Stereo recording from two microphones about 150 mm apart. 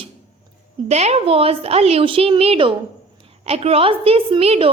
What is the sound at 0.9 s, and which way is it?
A woman's voice, 45° right (ahead or behind).